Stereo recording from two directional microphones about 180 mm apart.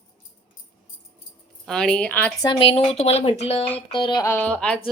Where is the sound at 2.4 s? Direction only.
25° left (ahead or behind).